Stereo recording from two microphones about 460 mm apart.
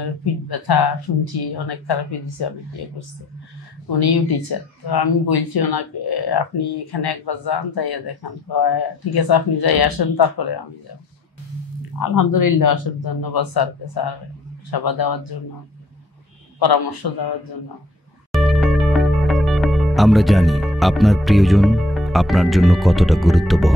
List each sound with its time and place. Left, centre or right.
0.2 s speech: left
4.0 s speech: left
12.0 s speech: left
16.5 s speech: left
18.3 s speech: centre